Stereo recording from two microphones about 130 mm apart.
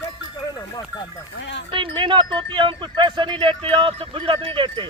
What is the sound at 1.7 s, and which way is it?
Speech, 40° right (ahead or behind).